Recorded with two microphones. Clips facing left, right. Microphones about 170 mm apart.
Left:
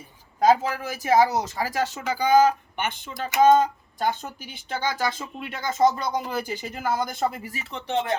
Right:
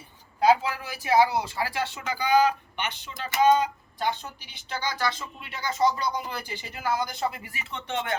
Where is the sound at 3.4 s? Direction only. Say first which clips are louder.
Left 4 dB; 45° left (ahead or behind).